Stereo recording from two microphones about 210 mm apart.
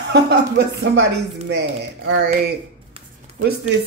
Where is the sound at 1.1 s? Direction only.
55° right (ahead or behind).